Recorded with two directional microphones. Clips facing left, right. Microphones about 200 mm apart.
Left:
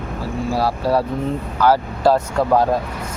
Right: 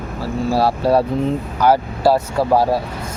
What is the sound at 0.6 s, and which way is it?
Speech, 25° right (ahead or behind).